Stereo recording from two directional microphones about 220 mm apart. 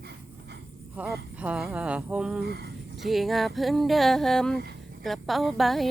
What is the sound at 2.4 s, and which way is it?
Speech, 45° right (ahead or behind).